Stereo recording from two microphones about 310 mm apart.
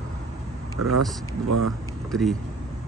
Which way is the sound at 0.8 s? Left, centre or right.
Right.